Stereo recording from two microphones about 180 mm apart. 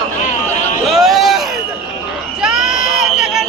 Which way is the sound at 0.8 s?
Centre (ahead or behind).